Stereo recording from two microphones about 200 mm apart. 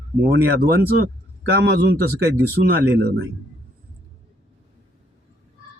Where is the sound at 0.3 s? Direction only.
55° right (ahead or behind).